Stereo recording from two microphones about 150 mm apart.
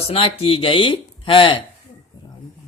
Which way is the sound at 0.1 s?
40° left (ahead or behind).